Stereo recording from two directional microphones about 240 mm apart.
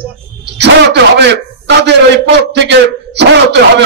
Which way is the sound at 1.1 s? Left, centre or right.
Right.